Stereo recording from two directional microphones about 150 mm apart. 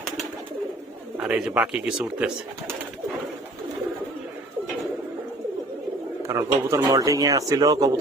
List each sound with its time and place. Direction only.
1.1 s speech: 10° right (ahead or behind)
6.2 s speech: 20° right (ahead or behind)